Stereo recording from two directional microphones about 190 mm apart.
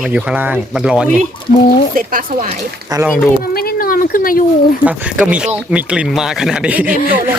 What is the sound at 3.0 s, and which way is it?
Speech, centre (ahead or behind).